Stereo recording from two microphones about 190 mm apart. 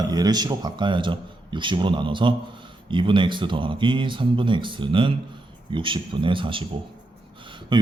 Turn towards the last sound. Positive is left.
turn(degrees=-25)  # may be behind; listen again after turning